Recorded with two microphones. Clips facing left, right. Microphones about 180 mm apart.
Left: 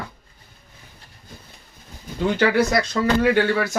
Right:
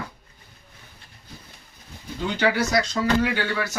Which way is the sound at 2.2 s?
55° left (ahead or behind).